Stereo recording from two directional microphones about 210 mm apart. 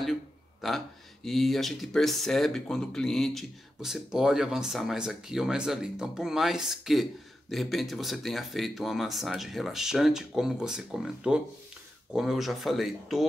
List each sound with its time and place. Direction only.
0.0 s speech: centre (ahead or behind)